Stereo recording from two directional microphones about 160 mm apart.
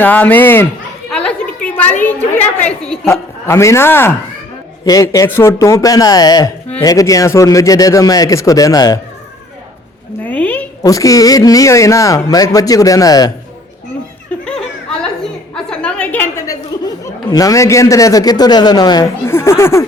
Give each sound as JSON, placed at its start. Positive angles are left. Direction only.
{"t": 0.0, "sound": "a man's voice", "side_deg": 10}
{"t": 1.1, "sound": "a sound", "side_deg": 5}
{"t": 2.6, "sound": "a woman's voice", "side_deg": 5}
{"t": 3.1, "sound": "a man's voice", "side_deg": 15}
{"t": 10.2, "sound": "a sound", "side_deg": 10}
{"t": 10.8, "sound": "speech", "side_deg": 20}
{"t": 15.5, "sound": "chuckle", "side_deg": 5}
{"t": 17.3, "sound": "speech", "side_deg": 20}